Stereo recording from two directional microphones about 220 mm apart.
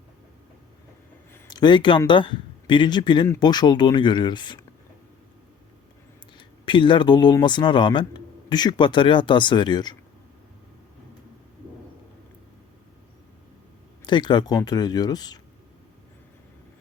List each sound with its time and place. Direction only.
1.3 s speech: 20° left (ahead or behind)
6.3 s speech: 20° left (ahead or behind)
14.0 s speech: 20° left (ahead or behind)